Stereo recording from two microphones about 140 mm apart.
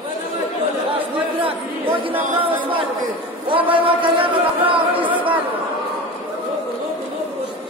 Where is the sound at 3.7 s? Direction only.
40° right (ahead or behind).